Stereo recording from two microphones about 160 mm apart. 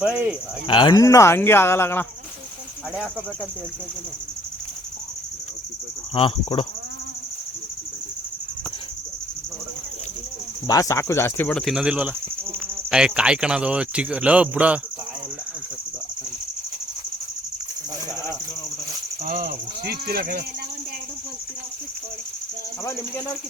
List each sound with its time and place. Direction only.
0.0 s speech: 5° right (ahead or behind)
0.7 s cricket: 30° left (ahead or behind); by 2.0 s 15° left (ahead or behind)
6.1 s speech: 30° left (ahead or behind)
10.7 s cricket: 20° left (ahead or behind); by 12.1 s 5° right (ahead or behind)
12.9 s speech: 5° right (ahead or behind)
19.2 s speech: 60° right (ahead or behind)
22.8 s cricket: 20° left (ahead or behind)